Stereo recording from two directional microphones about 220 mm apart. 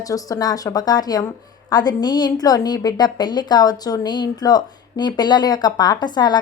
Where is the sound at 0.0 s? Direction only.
15° left (ahead or behind).